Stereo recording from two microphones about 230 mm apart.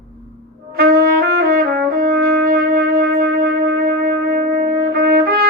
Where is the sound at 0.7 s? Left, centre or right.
Right.